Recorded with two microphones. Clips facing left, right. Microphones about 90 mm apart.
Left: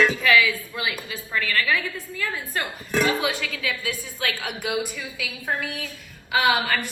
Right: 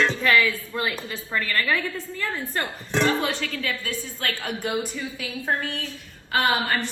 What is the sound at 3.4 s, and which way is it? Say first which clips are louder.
Speech: even; 40° right (ahead or behind).